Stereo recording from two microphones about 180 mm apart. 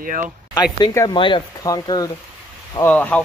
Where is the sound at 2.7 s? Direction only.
10° left (ahead or behind).